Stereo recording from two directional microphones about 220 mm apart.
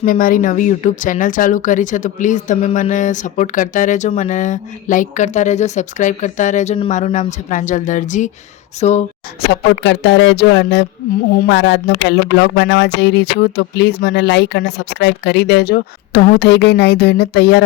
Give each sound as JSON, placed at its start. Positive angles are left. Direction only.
{"t": 0.0, "sound": "speech", "side_deg": 40}
{"t": 9.5, "sound": "speech", "side_deg": 55}